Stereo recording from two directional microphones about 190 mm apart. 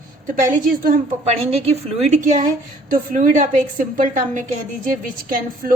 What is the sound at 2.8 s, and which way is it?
A woman's voice, 45° right (ahead or behind).